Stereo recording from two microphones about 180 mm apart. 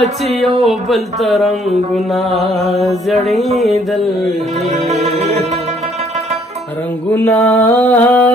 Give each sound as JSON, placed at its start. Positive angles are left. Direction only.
{"t": 0.2, "sound": "music", "side_deg": 0}
{"t": 4.6, "sound": "music", "side_deg": -40}
{"t": 7.1, "sound": "mantra", "side_deg": 10}